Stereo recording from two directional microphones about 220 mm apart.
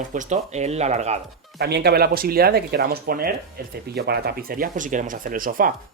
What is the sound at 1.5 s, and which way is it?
Speech, 45° right (ahead or behind).